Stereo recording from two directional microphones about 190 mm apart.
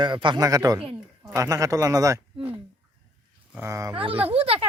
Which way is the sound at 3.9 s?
30° right (ahead or behind).